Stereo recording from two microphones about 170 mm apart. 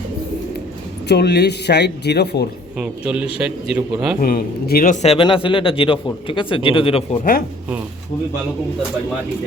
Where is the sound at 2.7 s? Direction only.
5° right (ahead or behind).